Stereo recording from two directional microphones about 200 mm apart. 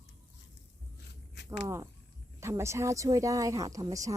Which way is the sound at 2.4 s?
15° right (ahead or behind).